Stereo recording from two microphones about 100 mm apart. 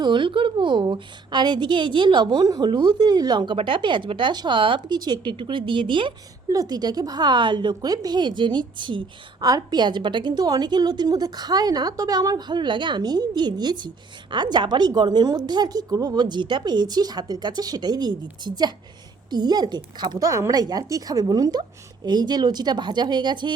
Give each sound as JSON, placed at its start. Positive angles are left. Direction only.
{"t": 0.0, "sound": "a woman's voice", "side_deg": -55}
{"t": 6.5, "sound": "a woman's voice", "side_deg": -40}